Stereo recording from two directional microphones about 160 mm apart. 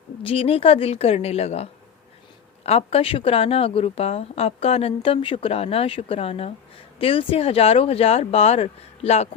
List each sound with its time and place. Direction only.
0.2 s speech: 35° left (ahead or behind)
2.6 s speech: 40° left (ahead or behind)